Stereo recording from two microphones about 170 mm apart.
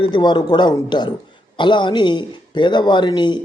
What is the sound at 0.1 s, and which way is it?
Speech, 25° left (ahead or behind).